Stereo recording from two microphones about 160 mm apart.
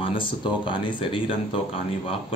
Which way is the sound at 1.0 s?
30° left (ahead or behind).